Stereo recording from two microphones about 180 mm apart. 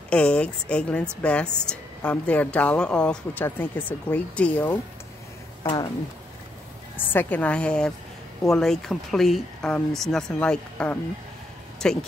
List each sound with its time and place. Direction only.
0.1 s a woman's voice: 5° left (ahead or behind)
7.1 s a woman's voice: 10° left (ahead or behind)